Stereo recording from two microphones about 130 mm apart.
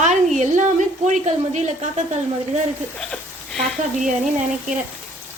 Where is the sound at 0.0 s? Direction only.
70° right (ahead or behind).